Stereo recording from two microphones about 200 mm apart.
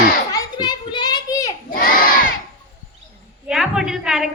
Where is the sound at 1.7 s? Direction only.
45° left (ahead or behind).